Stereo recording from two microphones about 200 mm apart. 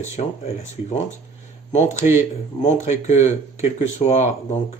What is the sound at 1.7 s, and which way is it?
Speech, 35° left (ahead or behind).